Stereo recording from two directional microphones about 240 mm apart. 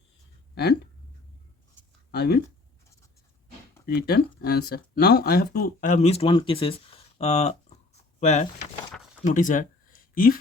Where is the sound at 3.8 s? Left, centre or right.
Left.